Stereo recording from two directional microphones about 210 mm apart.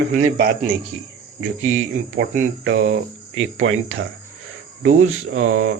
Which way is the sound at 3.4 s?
65° right (ahead or behind).